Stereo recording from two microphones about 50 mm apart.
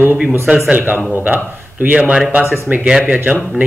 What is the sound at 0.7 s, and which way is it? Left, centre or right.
Speech, right.